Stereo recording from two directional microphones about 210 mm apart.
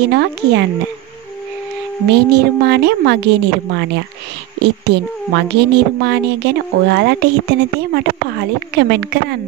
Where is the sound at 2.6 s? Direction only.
50° right (ahead or behind).